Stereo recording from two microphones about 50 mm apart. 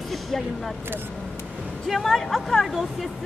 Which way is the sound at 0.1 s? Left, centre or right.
Centre.